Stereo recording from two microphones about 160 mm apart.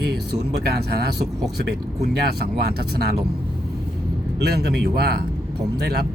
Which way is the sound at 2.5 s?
80° right.